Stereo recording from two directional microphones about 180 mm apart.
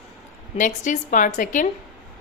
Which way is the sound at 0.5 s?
45° left (ahead or behind).